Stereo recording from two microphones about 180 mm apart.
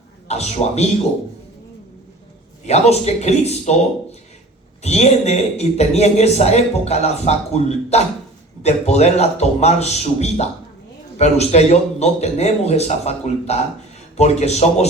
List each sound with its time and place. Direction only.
0.3 s speech: 35° left (ahead or behind)
2.6 s speech: 35° left (ahead or behind)
4.8 s speech: 40° left (ahead or behind)